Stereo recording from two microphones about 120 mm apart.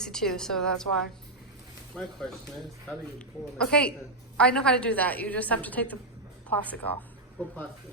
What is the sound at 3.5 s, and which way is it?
A woman's voice, 10° left (ahead or behind).